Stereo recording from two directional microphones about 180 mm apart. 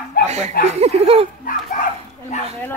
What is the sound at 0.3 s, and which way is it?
Speech, 40° right (ahead or behind).